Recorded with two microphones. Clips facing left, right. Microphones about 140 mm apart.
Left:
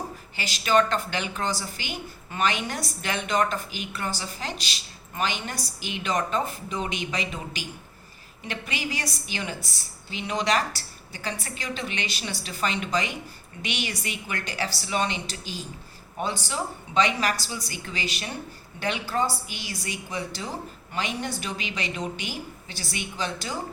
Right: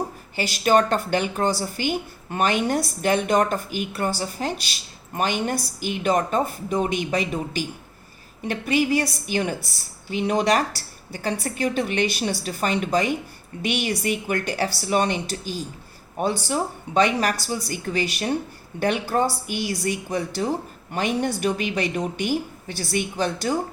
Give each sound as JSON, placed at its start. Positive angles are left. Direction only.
{"t": 0.3, "sound": "a woman's voice", "side_deg": -50}